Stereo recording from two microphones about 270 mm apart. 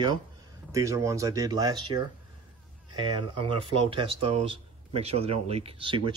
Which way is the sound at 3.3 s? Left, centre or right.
Centre.